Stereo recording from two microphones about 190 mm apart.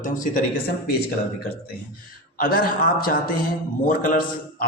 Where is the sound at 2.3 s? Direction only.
50° left (ahead or behind).